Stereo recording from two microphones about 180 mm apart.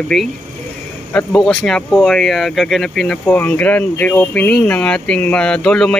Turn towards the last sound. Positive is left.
turn(degrees=5)  # may be behind; listen again after turning